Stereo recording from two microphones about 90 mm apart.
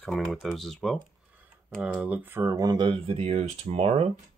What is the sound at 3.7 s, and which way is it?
Speech, 90° right.